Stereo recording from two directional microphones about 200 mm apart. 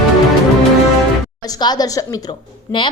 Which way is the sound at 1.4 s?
20° left (ahead or behind).